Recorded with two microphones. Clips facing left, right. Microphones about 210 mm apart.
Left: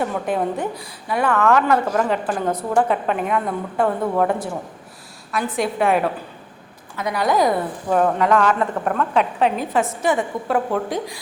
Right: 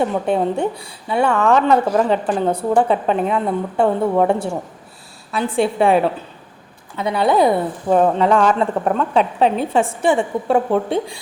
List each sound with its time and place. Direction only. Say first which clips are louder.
0.0 s a woman's voice: right 4 dB; 30° right (ahead or behind)
5.5 s a woman's voice: right 4 dB; 30° right (ahead or behind)